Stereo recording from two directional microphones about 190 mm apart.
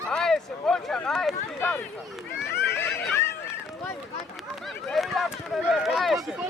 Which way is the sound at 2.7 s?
15° left (ahead or behind).